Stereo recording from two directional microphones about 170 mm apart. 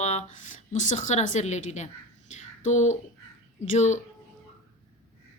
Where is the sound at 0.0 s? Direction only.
40° left (ahead or behind).